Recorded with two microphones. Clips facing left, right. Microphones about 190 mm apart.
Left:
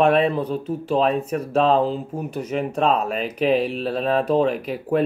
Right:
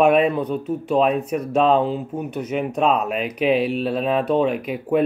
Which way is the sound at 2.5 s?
5° right (ahead or behind).